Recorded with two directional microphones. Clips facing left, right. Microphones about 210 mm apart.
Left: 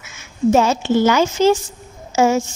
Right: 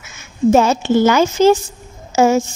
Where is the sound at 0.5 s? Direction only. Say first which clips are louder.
Right 2 dB; 50° right (ahead or behind).